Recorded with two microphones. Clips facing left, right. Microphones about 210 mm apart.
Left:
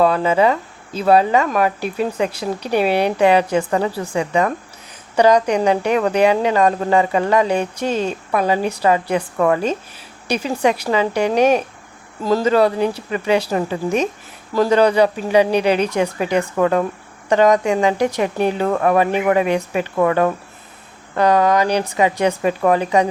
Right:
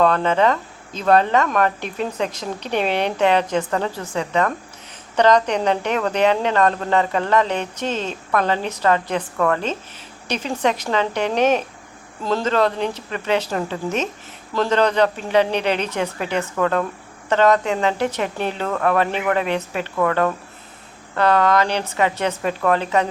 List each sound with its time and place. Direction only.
0.0 s speech: 10° left (ahead or behind)